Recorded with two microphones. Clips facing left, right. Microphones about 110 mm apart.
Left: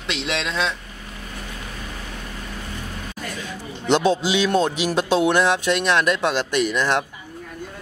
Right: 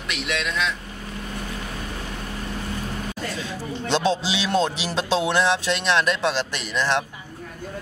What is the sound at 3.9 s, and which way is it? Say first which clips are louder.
Speech: left 4 dB; 15° left (ahead or behind).